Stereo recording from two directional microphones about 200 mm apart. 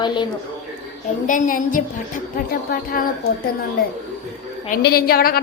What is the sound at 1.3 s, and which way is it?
A woman's voice, 40° left (ahead or behind).